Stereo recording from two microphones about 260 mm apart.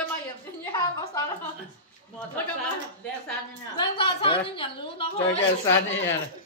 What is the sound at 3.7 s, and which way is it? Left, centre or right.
Speech, centre.